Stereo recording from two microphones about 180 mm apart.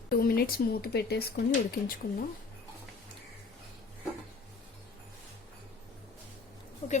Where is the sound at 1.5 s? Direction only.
55° left (ahead or behind).